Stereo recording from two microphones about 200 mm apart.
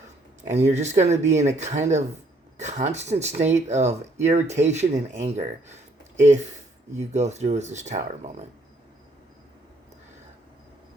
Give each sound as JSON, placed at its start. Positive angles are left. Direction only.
{"t": 0.5, "sound": "speech", "side_deg": -35}